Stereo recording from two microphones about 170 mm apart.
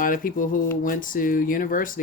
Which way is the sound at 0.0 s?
55° left (ahead or behind).